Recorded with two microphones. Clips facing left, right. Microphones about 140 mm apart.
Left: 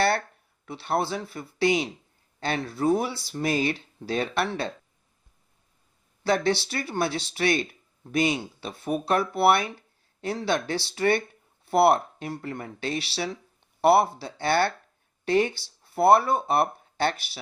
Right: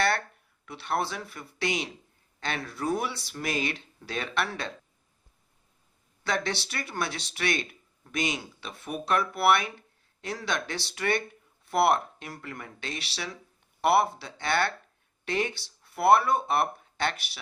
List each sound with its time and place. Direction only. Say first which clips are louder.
0.6 s speech: left 3 dB; 30° left (ahead or behind)
6.2 s speech: left 7 dB; 30° left (ahead or behind)